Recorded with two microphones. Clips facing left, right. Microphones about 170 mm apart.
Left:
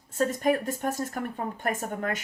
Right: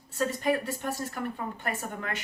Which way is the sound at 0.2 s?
45° left (ahead or behind).